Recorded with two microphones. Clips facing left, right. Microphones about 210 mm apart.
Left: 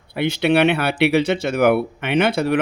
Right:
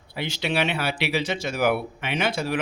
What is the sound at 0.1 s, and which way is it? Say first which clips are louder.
Speech: left 10 dB; 60° left (ahead or behind).